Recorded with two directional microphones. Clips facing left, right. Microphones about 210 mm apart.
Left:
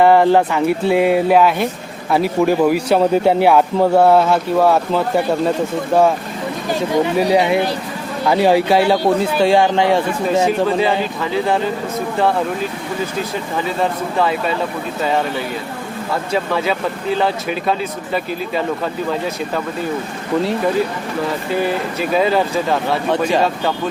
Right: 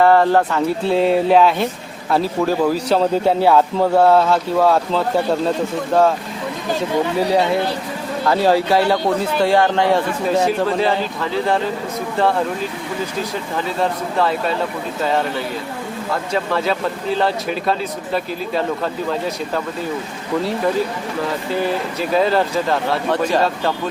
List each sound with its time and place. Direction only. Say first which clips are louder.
0.0 s speech: left 2 dB; 15° left (ahead or behind)
7.2 s speech: left 2 dB; 15° left (ahead or behind)
10.4 s speech: left 2 dB; centre (ahead or behind)
14.2 s speech: left 1 dB; 5° left (ahead or behind)
16.3 s speech: left 1 dB; 5° left (ahead or behind)
22.1 s speech: even; 5° left (ahead or behind)